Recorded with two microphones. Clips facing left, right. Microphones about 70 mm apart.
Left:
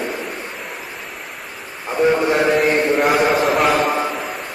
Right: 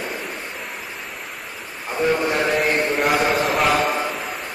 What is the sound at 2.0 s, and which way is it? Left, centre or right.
Speech, centre.